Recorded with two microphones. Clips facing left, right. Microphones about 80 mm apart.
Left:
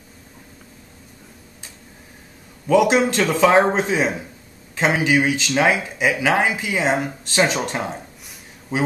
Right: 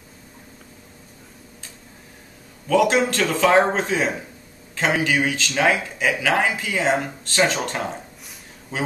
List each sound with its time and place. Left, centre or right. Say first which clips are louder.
2.7 s speech: left 2 dB; centre